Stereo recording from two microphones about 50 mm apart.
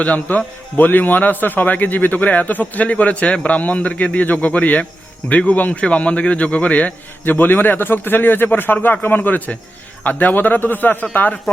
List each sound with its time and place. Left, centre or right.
0.0 s a man's voice: left
7.3 s speech: left